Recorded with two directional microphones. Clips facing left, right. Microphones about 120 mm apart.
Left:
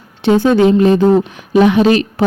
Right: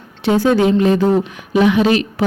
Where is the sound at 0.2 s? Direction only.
25° left (ahead or behind).